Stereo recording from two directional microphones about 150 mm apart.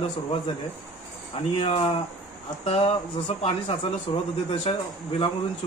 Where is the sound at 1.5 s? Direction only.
35° left (ahead or behind).